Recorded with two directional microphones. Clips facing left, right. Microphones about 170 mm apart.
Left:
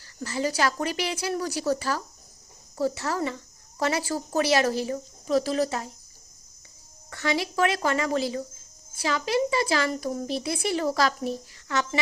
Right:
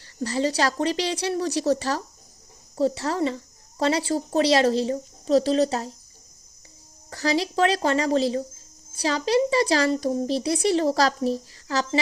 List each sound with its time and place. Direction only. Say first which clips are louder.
0.0 s speech: right 4 dB; 30° right (ahead or behind)
7.1 s speech: right 3 dB; 30° right (ahead or behind)